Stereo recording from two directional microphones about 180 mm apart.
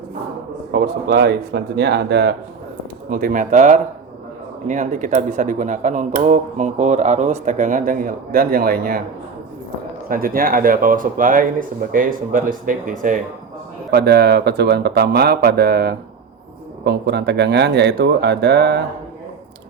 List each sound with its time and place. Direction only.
0.7 s speech: 65° right (ahead or behind)
3.1 s speech: 50° right (ahead or behind)
10.1 s speech: 50° right (ahead or behind)
13.9 s speech: 65° right (ahead or behind)